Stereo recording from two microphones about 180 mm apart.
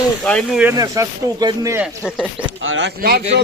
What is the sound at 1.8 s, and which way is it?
Speech, 5° right (ahead or behind).